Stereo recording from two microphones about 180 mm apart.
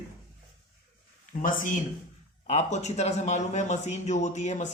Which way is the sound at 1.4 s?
45° left (ahead or behind).